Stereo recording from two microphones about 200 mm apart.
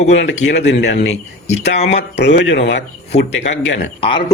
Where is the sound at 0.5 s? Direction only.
60° left (ahead or behind).